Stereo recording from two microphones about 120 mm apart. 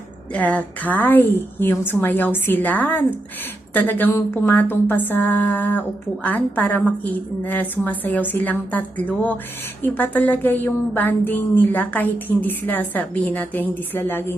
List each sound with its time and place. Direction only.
0.3 s speech: 10° left (ahead or behind)